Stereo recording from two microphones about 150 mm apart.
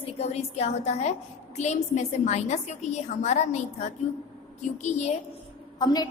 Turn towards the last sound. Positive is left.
turn(degrees=25)  # may be behind; listen again after turning